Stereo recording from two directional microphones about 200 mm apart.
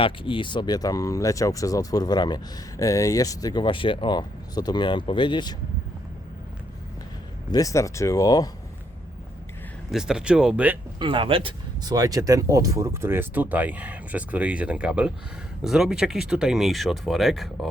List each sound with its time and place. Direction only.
0.0 s speech: 25° left (ahead or behind)
7.5 s speech: 15° left (ahead or behind)
9.9 s speech: 5° right (ahead or behind)
11.0 s speech: 25° right (ahead or behind); by 17.7 s centre (ahead or behind)